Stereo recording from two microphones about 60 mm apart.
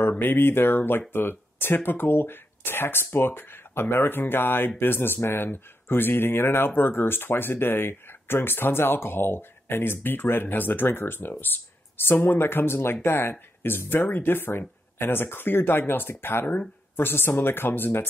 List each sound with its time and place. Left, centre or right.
0.2 s speech: left